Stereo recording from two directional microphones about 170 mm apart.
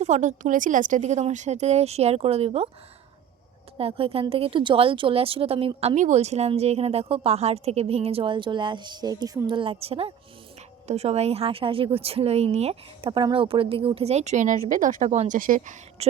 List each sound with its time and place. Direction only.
0.0 s a woman's voice: 45° right (ahead or behind)
3.8 s a woman's voice: 35° right (ahead or behind)